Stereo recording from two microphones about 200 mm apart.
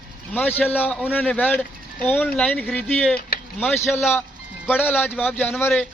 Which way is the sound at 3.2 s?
50° left (ahead or behind).